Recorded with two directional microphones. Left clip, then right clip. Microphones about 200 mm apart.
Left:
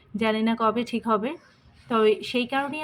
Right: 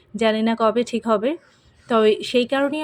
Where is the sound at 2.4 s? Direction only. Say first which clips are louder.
Right 6 dB; 20° right (ahead or behind).